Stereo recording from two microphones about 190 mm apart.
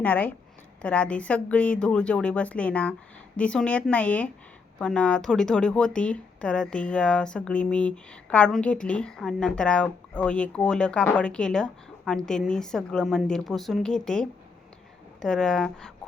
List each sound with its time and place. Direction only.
0.0 s speech: 10° left (ahead or behind)